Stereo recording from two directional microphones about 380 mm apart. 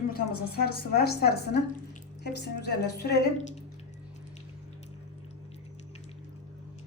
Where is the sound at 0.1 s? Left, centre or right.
Left.